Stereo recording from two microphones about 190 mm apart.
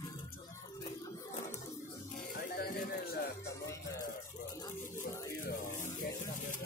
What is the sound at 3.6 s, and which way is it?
Music, 15° left (ahead or behind).